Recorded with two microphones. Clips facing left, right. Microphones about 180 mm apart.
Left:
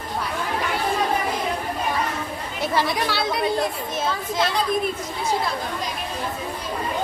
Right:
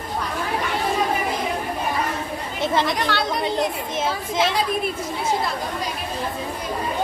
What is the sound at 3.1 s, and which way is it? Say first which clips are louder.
Speech: right 2 dB; 10° left (ahead or behind).